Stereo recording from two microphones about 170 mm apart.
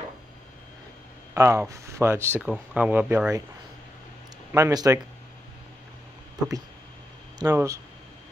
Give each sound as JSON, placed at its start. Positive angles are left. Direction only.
{"t": 1.3, "sound": "speech", "side_deg": -15}
{"t": 4.5, "sound": "speech", "side_deg": -20}
{"t": 7.3, "sound": "speech", "side_deg": -20}